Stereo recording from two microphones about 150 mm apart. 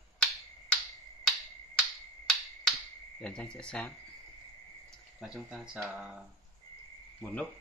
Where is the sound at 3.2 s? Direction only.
5° left (ahead or behind).